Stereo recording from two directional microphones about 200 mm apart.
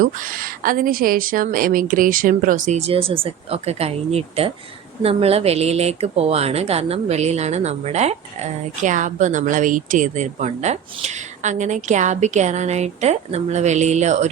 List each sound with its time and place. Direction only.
0.0 s a woman's voice: 45° right (ahead or behind)